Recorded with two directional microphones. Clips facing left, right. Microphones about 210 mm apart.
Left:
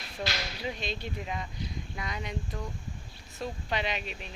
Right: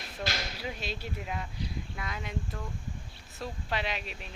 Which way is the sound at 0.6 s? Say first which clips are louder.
Left 2 dB; 5° right (ahead or behind).